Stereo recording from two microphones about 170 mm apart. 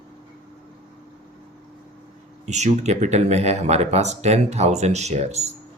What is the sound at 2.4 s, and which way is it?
Speech, 40° right (ahead or behind).